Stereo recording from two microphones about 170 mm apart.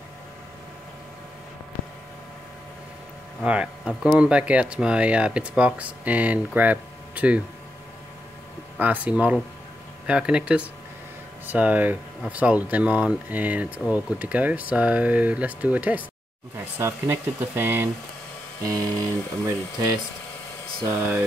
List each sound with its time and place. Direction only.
3.4 s speech: 5° right (ahead or behind)
8.7 s speech: 10° right (ahead or behind)